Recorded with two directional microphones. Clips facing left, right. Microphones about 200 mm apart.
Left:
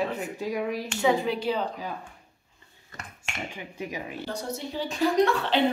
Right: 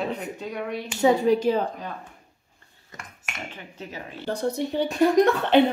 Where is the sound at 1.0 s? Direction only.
45° right (ahead or behind).